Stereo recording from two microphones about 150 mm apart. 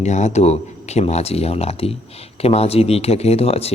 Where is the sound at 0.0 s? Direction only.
50° left (ahead or behind).